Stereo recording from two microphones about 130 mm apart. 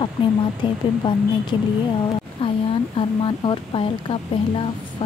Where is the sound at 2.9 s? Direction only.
40° left (ahead or behind).